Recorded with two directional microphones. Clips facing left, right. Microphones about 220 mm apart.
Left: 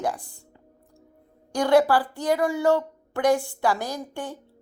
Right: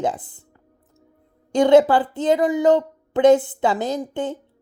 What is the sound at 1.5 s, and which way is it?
A woman's voice, 20° right (ahead or behind).